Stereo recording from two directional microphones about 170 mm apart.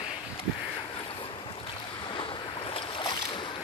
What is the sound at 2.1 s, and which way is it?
Boat, 30° left (ahead or behind).